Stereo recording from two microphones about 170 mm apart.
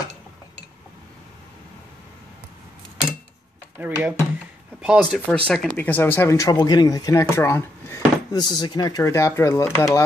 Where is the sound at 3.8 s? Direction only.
10° right (ahead or behind).